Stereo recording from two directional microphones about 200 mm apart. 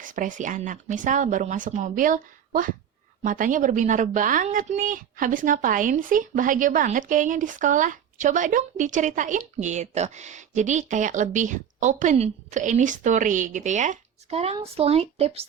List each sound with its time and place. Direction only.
0.0 s a woman's voice: 40° right (ahead or behind)